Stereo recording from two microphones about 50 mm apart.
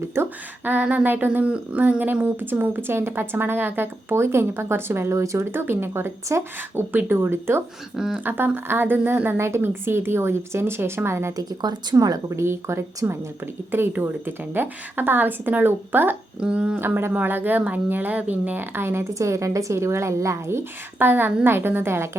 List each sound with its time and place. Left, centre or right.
0.6 s a woman's voice: right
4.1 s speech: right
5.5 s a woman's voice: right
6.3 s speech: right
6.7 s speech: right
7.9 s speech: centre
8.2 s a woman's voice: right
11.9 s a woman's voice: right
13.7 s a woman's voice: right
16.4 s speech: right
16.7 s a woman's voice: right
19.2 s a woman's voice: right
21.0 s a woman's voice: right